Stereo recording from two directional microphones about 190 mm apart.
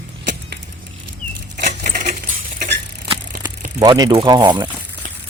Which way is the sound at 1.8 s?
45° right (ahead or behind).